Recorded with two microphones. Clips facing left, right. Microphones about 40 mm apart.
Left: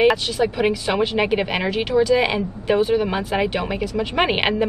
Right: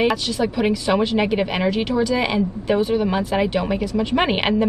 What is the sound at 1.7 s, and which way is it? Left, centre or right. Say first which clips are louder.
A woman's voice: left 2 dB; left.